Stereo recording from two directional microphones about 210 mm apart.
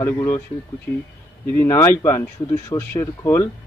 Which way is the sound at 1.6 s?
10° left (ahead or behind).